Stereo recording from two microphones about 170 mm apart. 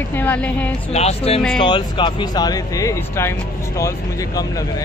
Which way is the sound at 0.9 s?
40° left (ahead or behind).